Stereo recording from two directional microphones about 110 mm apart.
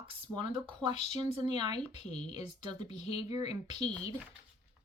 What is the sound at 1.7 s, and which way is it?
Speech, 65° left (ahead or behind).